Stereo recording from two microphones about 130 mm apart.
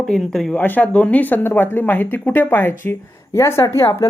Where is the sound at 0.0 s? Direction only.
5° left (ahead or behind).